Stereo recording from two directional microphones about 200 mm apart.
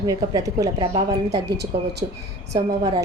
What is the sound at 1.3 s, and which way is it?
Speech, 55° right (ahead or behind).